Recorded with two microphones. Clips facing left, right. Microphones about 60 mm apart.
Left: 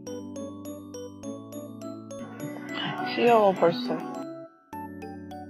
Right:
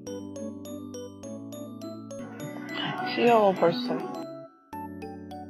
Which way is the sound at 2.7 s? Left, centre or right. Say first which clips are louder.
Even; centre.